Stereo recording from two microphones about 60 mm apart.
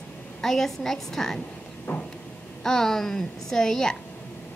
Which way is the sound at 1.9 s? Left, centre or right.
Left.